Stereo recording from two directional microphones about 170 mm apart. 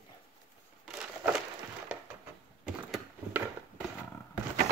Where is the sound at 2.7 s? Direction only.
5° right (ahead or behind).